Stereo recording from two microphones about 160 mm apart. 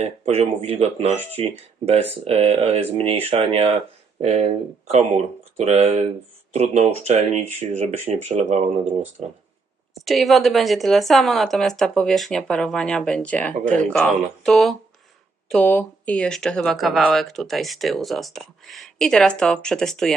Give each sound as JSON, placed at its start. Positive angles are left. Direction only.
{"t": 0.0, "sound": "speech", "side_deg": -40}
{"t": 4.9, "sound": "speech", "side_deg": -45}
{"t": 10.1, "sound": "a woman's voice", "side_deg": 0}